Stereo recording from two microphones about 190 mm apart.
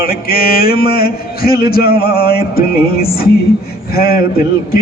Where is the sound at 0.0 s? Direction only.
50° left (ahead or behind).